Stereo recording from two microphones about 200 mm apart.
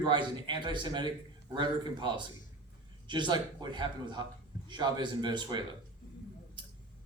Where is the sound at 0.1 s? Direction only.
25° right (ahead or behind).